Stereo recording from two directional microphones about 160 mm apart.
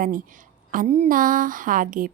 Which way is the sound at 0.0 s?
60° right (ahead or behind).